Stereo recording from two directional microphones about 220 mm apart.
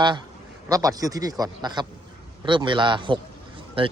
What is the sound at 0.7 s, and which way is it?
A man's voice, 15° right (ahead or behind).